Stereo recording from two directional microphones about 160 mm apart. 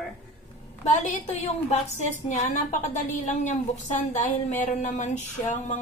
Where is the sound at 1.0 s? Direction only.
45° left (ahead or behind).